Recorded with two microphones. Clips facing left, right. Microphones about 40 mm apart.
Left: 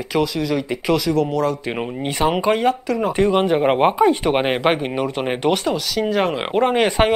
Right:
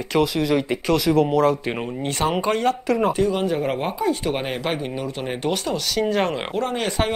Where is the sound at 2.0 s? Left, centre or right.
Centre.